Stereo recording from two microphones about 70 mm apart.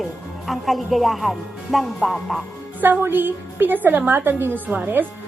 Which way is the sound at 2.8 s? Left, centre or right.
Right.